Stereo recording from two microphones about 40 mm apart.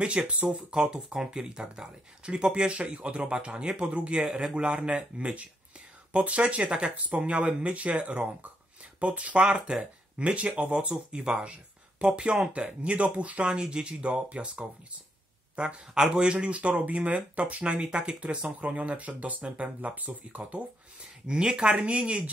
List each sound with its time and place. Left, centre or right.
0.3 s speech: right
9.4 s speech: right
13.5 s speech: right
21.3 s speech: right